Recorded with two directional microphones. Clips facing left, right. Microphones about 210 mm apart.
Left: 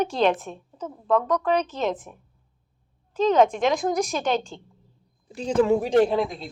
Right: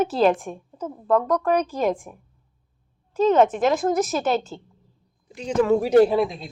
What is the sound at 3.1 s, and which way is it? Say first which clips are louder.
A woman's voice: right 2 dB; 5° right (ahead or behind).